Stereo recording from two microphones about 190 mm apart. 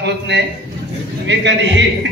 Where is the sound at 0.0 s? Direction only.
65° right (ahead or behind).